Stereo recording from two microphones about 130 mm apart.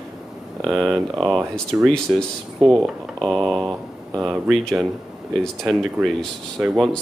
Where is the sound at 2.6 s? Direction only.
40° right (ahead or behind).